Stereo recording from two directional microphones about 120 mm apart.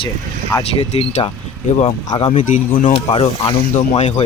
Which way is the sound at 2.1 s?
45° left (ahead or behind).